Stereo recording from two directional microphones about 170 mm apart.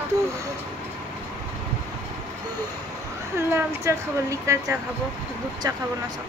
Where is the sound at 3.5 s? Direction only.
15° right (ahead or behind).